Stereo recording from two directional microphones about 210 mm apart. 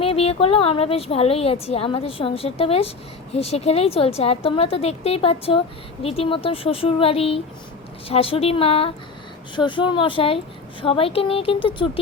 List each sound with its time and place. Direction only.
0.0 s a woman's voice: 25° left (ahead or behind)